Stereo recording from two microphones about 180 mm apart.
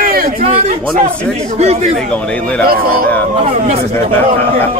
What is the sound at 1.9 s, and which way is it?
Speech, 5° left (ahead or behind).